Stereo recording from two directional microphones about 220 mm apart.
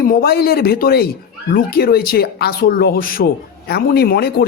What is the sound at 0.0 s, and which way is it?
Speech, 40° left (ahead or behind).